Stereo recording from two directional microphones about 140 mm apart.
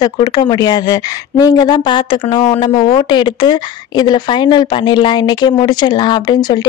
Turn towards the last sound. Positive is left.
turn(degrees=30)  # may be behind; listen again after turning